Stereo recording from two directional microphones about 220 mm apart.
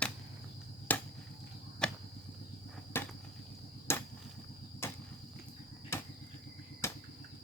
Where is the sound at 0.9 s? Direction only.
5° left (ahead or behind).